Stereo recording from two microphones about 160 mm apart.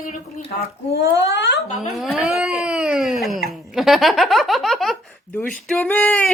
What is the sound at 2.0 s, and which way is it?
Speech, 5° right (ahead or behind).